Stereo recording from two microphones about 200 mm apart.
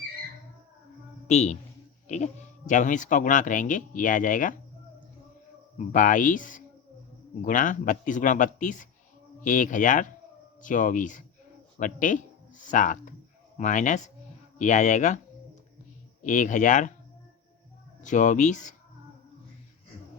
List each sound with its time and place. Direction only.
1.3 s speech: 35° left (ahead or behind)
5.9 s speech: 40° left (ahead or behind)
16.2 s speech: 40° left (ahead or behind)
18.0 s speech: 40° left (ahead or behind)